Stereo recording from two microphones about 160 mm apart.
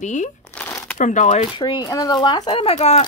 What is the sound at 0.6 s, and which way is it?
Crumpling, 10° left (ahead or behind).